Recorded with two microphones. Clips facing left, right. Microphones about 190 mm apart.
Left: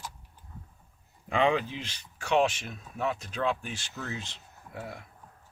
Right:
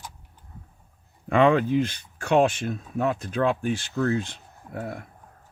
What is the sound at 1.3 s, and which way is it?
Speech, 55° right (ahead or behind).